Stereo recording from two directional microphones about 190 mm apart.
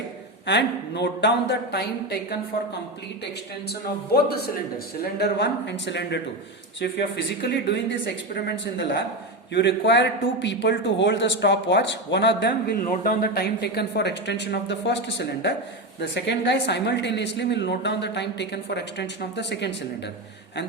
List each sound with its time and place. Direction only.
0.4 s a woman's voice: 65° left (ahead or behind)
3.7 s a woman's voice: 55° left (ahead or behind)
12.9 s a woman's voice: 45° left (ahead or behind); by 19.7 s 65° left (ahead or behind)